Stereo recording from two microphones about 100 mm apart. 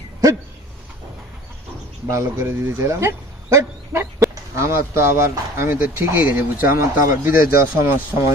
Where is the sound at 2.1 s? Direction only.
30° right (ahead or behind).